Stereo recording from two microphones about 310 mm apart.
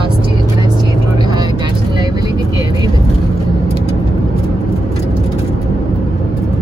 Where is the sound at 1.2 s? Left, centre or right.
Centre.